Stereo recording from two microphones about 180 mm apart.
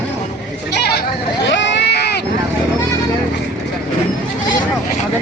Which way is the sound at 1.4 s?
80° left.